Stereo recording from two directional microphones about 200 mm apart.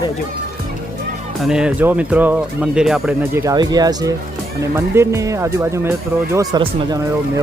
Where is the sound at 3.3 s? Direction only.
20° right (ahead or behind).